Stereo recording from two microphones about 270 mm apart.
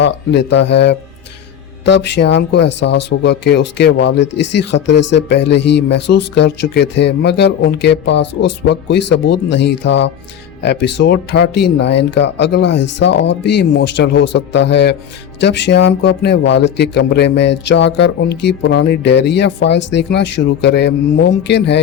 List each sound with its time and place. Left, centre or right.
0.0 s speech: left
2.0 s speech: left